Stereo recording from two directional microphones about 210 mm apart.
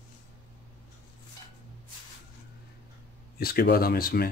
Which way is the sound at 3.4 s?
45° left (ahead or behind).